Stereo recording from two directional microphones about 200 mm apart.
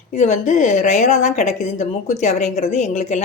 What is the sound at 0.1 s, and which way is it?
A woman's voice, 35° left (ahead or behind).